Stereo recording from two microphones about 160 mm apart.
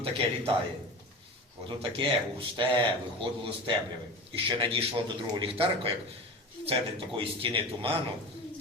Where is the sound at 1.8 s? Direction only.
35° right (ahead or behind).